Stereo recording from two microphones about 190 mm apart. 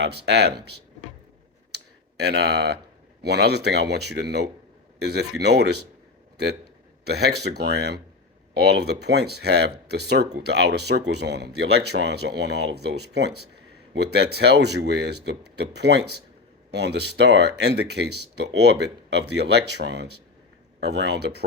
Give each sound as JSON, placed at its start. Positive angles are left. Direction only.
{"t": 0.0, "sound": "speech", "side_deg": -60}
{"t": 1.7, "sound": "a sound", "side_deg": -60}
{"t": 3.2, "sound": "a man's voice", "side_deg": -60}